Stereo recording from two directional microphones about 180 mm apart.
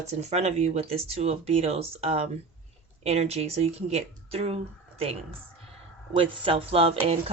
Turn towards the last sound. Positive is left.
turn(degrees=-35)  # may be behind; listen again after turning